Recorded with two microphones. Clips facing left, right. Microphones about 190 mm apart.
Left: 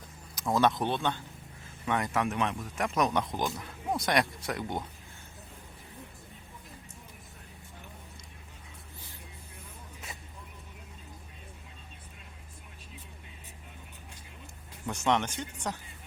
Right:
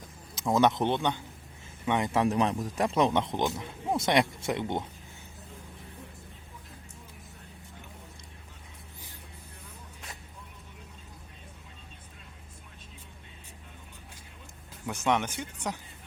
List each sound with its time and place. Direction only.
0.3 s a man's voice: 20° right (ahead or behind)
2.2 s a man's voice: 35° right (ahead or behind)
14.8 s speech: 10° right (ahead or behind)